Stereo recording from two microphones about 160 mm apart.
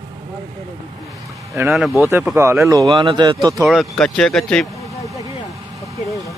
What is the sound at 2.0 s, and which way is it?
Speech, 15° right (ahead or behind).